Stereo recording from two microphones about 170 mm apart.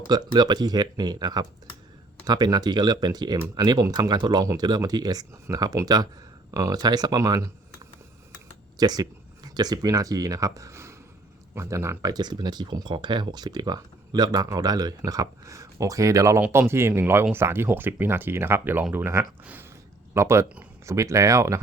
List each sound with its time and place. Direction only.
0.1 s speech: 25° right (ahead or behind)